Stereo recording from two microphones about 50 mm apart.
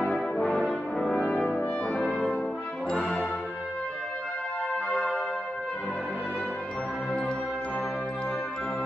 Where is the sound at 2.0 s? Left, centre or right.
Left.